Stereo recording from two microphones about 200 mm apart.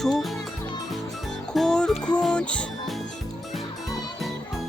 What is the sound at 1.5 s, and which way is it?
Music, centre (ahead or behind).